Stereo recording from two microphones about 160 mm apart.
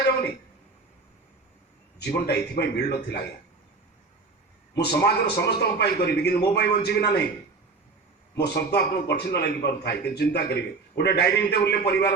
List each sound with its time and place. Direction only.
2.0 s a man's voice: 90° left
4.7 s a man's voice: 90° left
8.4 s a man's voice: 90° left